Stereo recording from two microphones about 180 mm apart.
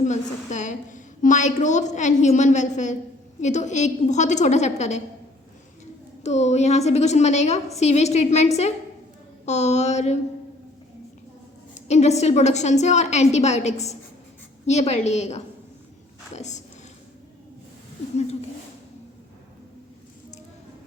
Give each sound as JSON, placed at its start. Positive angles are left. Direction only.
{"t": 0.0, "sound": "a woman's voice", "side_deg": 40}
{"t": 6.2, "sound": "a woman's voice", "side_deg": 40}
{"t": 9.5, "sound": "a woman's voice", "side_deg": 40}
{"t": 11.7, "sound": "a woman's voice", "side_deg": 40}